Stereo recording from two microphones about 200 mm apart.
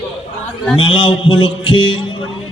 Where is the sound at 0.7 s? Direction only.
25° left (ahead or behind).